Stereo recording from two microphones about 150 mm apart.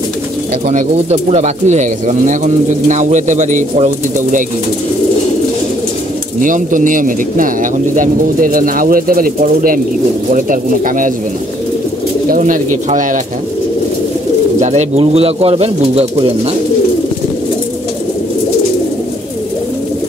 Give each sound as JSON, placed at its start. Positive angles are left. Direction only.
{"t": 0.7, "sound": "speech", "side_deg": -45}
{"t": 6.4, "sound": "speech", "side_deg": -60}
{"t": 12.3, "sound": "speech", "side_deg": -60}
{"t": 14.6, "sound": "speech", "side_deg": -50}